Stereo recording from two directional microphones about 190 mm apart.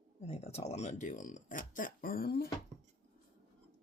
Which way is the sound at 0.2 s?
35° left (ahead or behind).